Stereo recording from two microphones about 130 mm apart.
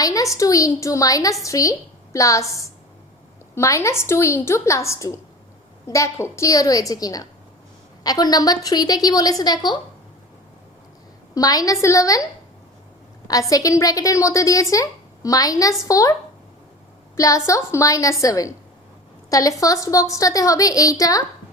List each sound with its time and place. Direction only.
0.0 s a woman's voice: 25° left (ahead or behind)
11.3 s a woman's voice: 30° left (ahead or behind)
13.5 s a woman's voice: 25° left (ahead or behind)
17.2 s a woman's voice: 25° left (ahead or behind)